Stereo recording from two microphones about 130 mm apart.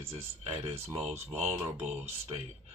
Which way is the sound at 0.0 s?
50° right (ahead or behind).